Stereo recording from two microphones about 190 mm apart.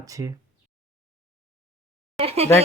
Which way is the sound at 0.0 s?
15° right (ahead or behind).